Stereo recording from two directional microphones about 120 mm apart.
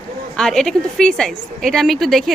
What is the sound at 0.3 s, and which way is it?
A woman's voice, 5° left (ahead or behind).